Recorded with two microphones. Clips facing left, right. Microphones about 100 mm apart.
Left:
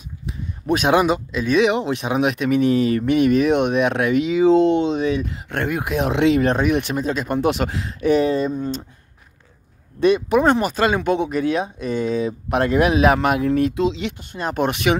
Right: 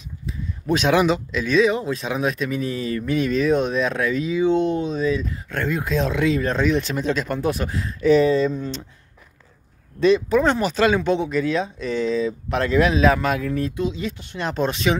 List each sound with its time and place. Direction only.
0.7 s speech: 50° left (ahead or behind)
1.5 s speech: 75° left (ahead or behind)
3.1 s speech: 60° left (ahead or behind)
5.7 s speech: 20° left (ahead or behind)
6.2 s speech: 80° left
6.5 s speech: 60° left (ahead or behind)
7.0 s speech: 10° left (ahead or behind)
7.4 s speech: 85° left; by 8.5 s 55° left (ahead or behind)
9.9 s speech: 60° left (ahead or behind)
13.6 s speech: 90° left
14.1 s speech: 50° left (ahead or behind)
14.6 s speech: 60° left (ahead or behind)